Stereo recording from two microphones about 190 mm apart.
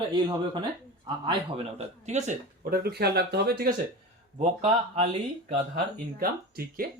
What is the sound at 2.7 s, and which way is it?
Speech, 55° right (ahead or behind).